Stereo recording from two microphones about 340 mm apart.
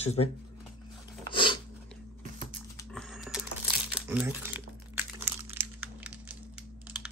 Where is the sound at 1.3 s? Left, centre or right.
Centre.